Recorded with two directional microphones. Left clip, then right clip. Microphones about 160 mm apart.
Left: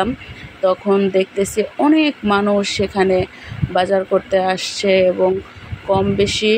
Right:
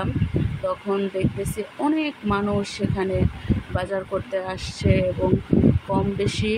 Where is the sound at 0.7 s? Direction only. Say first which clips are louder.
Left 10 dB; 20° left (ahead or behind).